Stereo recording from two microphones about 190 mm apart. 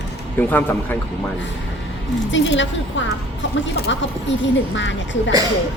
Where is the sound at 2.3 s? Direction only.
75° left (ahead or behind).